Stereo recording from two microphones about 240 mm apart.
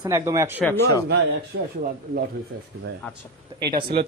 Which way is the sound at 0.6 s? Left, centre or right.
Centre.